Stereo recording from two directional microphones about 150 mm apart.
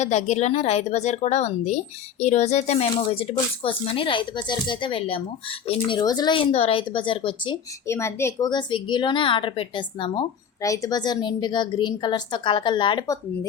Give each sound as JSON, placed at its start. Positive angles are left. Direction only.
{"t": 0.0, "sound": "a woman's voice", "side_deg": 50}
{"t": 7.9, "sound": "a woman's voice", "side_deg": 20}